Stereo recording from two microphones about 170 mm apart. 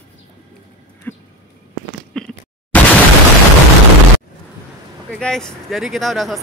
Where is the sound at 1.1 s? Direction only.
10° left (ahead or behind).